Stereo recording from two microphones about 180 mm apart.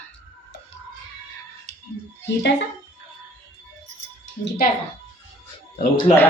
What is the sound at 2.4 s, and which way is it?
Speech, 70° left (ahead or behind).